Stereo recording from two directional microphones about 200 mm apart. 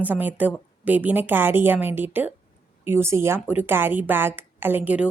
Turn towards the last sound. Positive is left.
turn(degrees=-5)  # may be behind; listen again after turning